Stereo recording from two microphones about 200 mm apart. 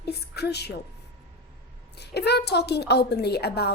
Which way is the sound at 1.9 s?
55° left (ahead or behind).